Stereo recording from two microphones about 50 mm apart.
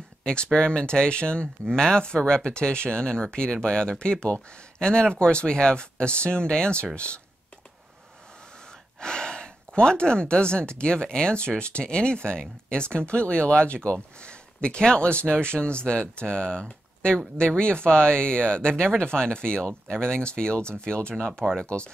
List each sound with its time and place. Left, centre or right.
0.2 s speech: centre
9.0 s speech: centre